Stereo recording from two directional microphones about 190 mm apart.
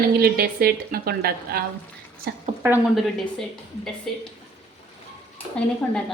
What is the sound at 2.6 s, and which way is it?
Speech, 10° right (ahead or behind).